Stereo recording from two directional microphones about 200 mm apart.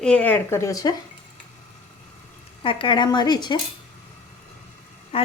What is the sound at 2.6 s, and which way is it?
Speech, 25° left (ahead or behind).